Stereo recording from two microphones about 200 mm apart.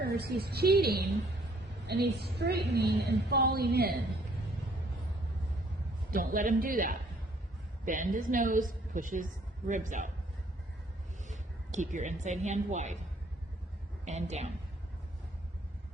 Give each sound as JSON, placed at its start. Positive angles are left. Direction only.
{"t": 0.0, "sound": "a woman's voice", "side_deg": -50}
{"t": 6.1, "sound": "a woman's voice", "side_deg": -45}
{"t": 11.3, "sound": "a woman's voice", "side_deg": -35}
{"t": 14.0, "sound": "a woman's voice", "side_deg": -35}